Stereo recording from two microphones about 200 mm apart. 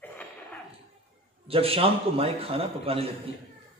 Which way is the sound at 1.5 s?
30° right (ahead or behind).